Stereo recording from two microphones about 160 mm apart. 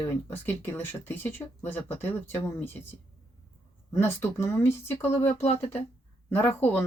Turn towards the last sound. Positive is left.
turn(degrees=15)  # may be behind; listen again after turning